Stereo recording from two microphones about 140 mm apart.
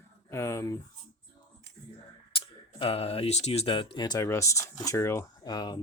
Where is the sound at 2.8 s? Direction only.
45° left (ahead or behind).